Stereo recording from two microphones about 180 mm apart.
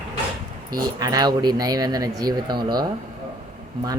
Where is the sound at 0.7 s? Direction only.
20° right (ahead or behind).